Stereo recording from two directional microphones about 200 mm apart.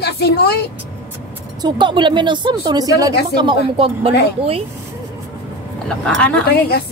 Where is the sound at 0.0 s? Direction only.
55° left (ahead or behind).